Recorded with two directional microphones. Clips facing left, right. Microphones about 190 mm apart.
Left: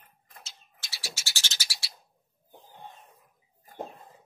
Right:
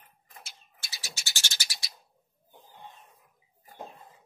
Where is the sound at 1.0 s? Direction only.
20° right (ahead or behind).